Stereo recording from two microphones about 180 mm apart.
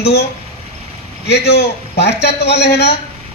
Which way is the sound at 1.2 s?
65° left (ahead or behind).